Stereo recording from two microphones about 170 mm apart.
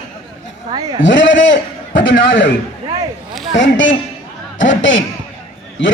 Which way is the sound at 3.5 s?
90° left.